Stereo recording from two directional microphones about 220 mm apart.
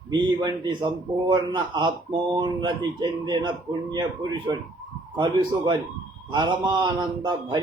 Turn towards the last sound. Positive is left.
turn(degrees=-20)  # may be behind; listen again after turning